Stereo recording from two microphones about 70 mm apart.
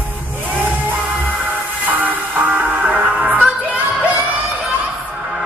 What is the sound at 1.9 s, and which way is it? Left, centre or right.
Music, right.